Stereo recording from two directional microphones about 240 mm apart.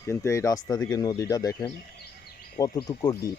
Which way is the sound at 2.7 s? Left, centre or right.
Centre.